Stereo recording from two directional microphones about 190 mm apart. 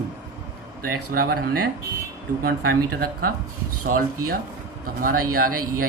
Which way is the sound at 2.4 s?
50° right (ahead or behind).